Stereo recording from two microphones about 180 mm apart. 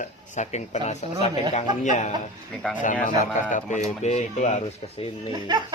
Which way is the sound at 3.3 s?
45° left (ahead or behind).